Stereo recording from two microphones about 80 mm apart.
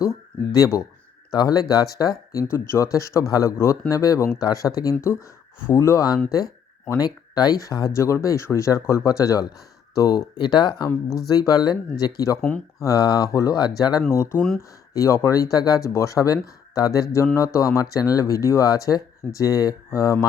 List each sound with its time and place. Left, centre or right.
0.0 s speech: left
2.5 s speech: left
6.3 s a sound: left
7.3 s speech: left
7.9 s speech: left
10.8 s speech: left
12.4 s speech: centre
12.8 s speech: left
14.1 s speech: left
15.9 s speech: left